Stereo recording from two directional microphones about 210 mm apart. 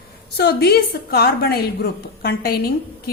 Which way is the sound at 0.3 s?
50° left (ahead or behind).